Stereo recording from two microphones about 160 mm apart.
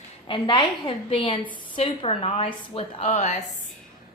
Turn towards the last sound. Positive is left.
turn(degrees=45)  # may be behind; listen again after turning